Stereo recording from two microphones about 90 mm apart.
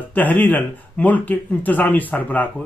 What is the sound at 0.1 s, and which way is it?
Speech, 20° left (ahead or behind).